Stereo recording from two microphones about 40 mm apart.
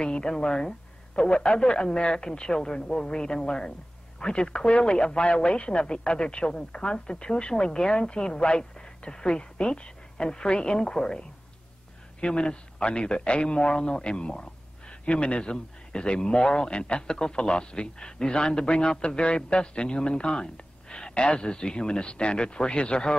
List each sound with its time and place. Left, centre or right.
0.0 s a man's voice: left